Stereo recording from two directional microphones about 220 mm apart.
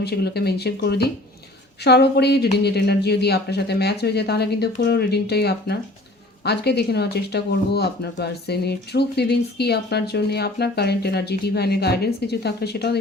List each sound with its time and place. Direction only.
0.0 s speech: 45° left (ahead or behind)